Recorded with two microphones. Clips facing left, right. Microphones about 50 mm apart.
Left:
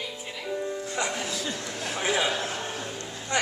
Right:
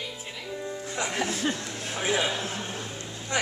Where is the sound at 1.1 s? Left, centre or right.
Right.